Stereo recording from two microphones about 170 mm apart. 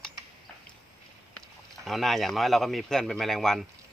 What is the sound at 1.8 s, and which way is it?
Speech, centre (ahead or behind).